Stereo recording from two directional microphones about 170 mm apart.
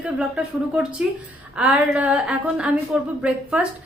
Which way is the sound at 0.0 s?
5° right (ahead or behind).